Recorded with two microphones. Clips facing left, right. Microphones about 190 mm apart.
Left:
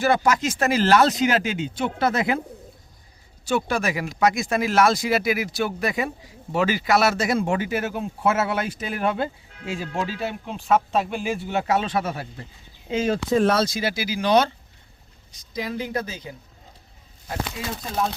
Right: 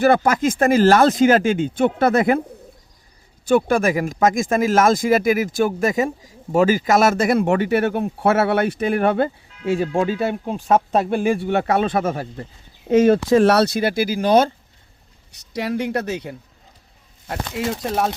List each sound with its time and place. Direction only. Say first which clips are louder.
0.0 s speech: right 5 dB; 55° right (ahead or behind)
3.4 s speech: right 7 dB; 50° right (ahead or behind)
13.2 s speech: right 5 dB; 80° right; by 14.5 s 45° right (ahead or behind)
15.3 s a woman's voice: right 6 dB; 70° right (ahead or behind)
17.5 s a woman's voice: right 7 dB; 70° right (ahead or behind)